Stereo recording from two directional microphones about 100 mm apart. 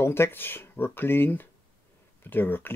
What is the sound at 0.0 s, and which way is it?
Speech, 25° left (ahead or behind).